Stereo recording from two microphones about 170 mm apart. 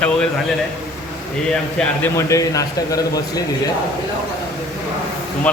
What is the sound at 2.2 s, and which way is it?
Speech, 20° left (ahead or behind).